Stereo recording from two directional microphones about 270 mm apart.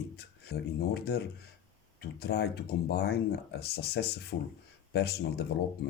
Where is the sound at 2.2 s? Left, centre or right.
Left.